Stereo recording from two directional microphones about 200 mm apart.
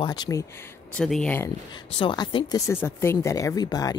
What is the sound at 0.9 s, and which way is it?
Speech, 5° left (ahead or behind).